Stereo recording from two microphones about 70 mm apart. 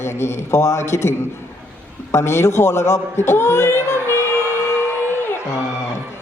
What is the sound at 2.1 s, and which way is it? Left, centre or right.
A man's voice, left.